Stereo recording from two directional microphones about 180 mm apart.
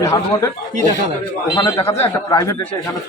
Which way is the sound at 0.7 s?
45° right (ahead or behind).